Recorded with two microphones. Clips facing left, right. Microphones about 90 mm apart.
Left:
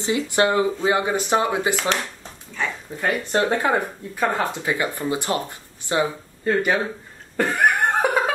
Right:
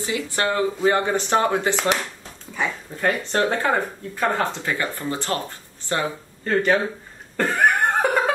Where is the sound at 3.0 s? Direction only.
15° left (ahead or behind).